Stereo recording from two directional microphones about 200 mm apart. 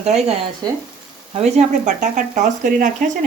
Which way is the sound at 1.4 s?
35° right (ahead or behind).